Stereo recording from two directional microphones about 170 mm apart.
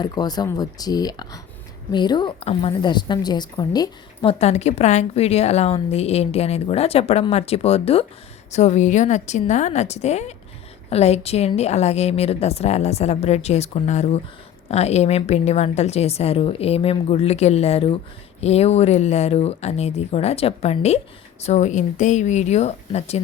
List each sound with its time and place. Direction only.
0.0 s a woman's voice: 25° left (ahead or behind)